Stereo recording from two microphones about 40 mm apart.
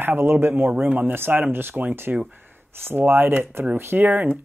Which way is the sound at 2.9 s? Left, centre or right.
Right.